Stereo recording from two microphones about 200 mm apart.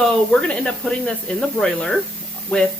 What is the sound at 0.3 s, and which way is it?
Speech, 5° left (ahead or behind).